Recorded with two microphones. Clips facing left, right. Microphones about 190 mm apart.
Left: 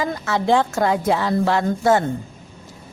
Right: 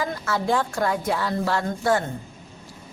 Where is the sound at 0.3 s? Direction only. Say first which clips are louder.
Left 6 dB; 90° left.